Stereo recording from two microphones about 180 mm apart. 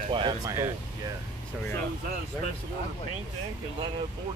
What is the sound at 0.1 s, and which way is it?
Speech, 25° right (ahead or behind).